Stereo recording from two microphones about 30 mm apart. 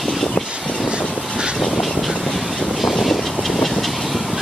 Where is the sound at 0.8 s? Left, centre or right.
Right.